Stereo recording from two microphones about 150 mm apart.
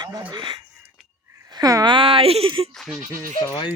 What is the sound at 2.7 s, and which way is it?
Speech, centre (ahead or behind).